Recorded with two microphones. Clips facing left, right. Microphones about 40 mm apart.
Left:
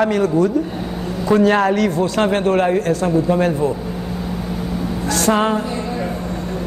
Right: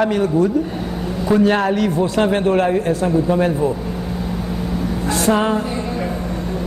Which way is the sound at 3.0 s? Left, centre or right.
Centre.